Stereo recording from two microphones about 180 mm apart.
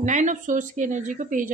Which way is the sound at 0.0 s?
45° right (ahead or behind).